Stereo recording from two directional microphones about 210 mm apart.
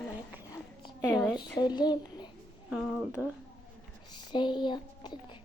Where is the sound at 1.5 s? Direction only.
20° left (ahead or behind).